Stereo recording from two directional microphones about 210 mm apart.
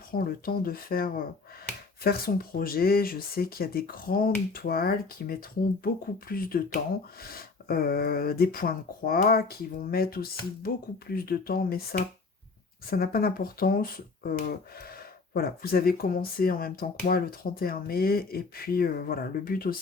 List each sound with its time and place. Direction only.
0.1 s speech: 45° left (ahead or behind)